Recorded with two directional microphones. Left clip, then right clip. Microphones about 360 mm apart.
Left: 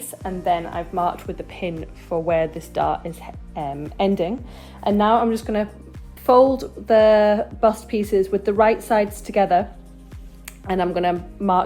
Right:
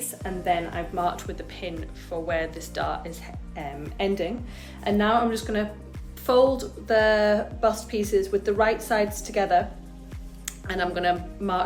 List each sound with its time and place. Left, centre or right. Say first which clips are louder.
0.2 s speech: left 4 dB; centre